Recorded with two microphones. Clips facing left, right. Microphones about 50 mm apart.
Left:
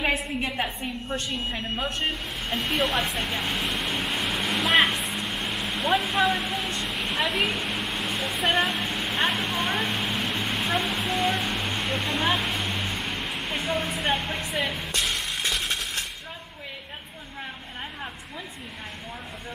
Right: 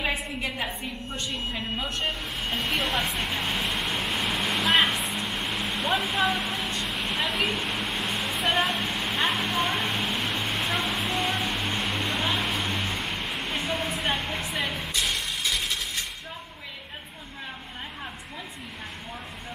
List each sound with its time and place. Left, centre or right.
1.5 s speech: left
2.4 s vehicle: centre
12.4 s a sound: centre